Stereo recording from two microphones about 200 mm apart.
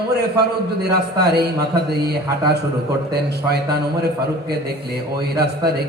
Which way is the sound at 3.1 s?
55° right (ahead or behind).